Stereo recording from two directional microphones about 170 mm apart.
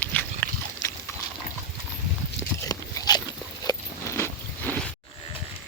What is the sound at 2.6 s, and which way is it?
Crunch, 20° left (ahead or behind).